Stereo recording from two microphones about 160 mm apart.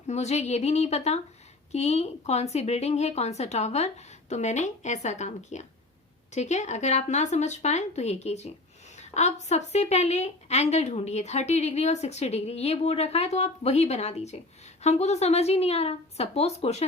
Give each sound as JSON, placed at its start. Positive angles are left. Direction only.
{"t": 0.1, "sound": "a woman's voice", "side_deg": 45}